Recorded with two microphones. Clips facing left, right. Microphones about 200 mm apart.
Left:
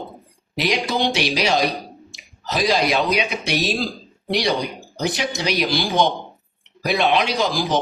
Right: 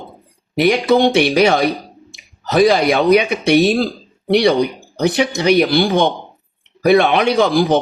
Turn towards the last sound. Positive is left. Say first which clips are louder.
# right 8 dB
turn(degrees=-60)  # may be behind; listen again after turning